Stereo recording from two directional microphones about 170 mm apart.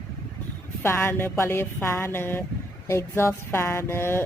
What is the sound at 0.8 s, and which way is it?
Speech, 15° left (ahead or behind).